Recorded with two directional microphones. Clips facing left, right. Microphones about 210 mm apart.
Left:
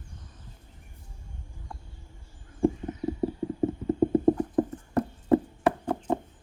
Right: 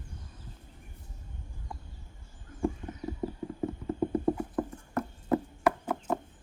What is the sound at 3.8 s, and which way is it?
Clip-clop, 30° left (ahead or behind).